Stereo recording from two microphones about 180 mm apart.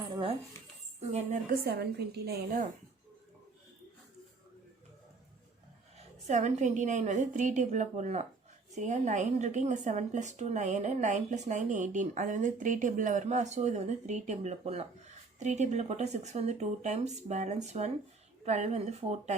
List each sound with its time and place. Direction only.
0.1 s dog: 30° right (ahead or behind)
1.1 s a woman's voice: 40° right (ahead or behind)
1.6 s a woman's voice: 60° right (ahead or behind)
6.2 s a woman's voice: 40° right (ahead or behind)